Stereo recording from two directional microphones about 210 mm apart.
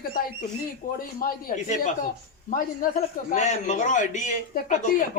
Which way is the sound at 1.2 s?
40° left (ahead or behind).